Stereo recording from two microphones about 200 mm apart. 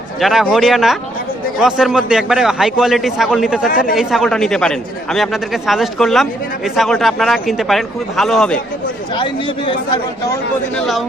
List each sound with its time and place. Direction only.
0.2 s a man's voice: centre (ahead or behind)
9.1 s speech: 25° left (ahead or behind)
10.8 s a man's voice: centre (ahead or behind)